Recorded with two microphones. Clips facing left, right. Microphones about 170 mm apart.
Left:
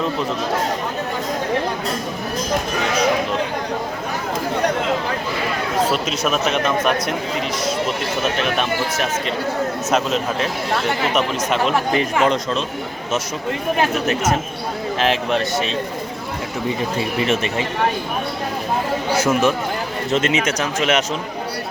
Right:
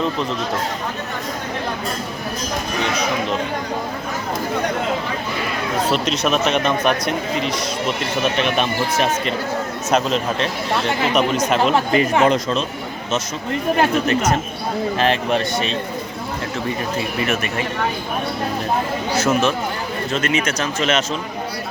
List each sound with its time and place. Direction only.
5.9 s speech: 5° left (ahead or behind)
14.1 s speech: 5° left (ahead or behind)
19.2 s speech: 15° left (ahead or behind)